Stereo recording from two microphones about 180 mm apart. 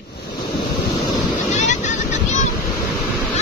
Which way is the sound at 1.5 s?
40° left (ahead or behind).